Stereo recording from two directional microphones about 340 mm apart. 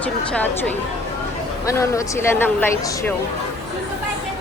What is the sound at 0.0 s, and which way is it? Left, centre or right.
A woman's voice, centre.